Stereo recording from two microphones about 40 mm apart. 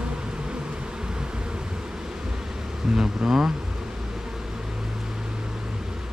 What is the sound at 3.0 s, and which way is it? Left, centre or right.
Speech, centre.